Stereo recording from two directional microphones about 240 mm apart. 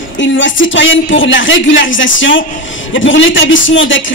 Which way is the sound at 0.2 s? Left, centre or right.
Left.